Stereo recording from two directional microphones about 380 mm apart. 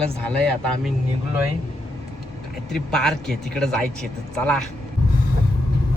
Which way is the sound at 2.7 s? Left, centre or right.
Centre.